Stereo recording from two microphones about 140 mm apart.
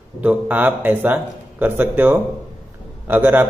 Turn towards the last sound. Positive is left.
turn(degrees=-15)  # may be behind; listen again after turning